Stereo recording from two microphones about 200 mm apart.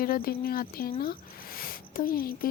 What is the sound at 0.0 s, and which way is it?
Speech, 45° left (ahead or behind).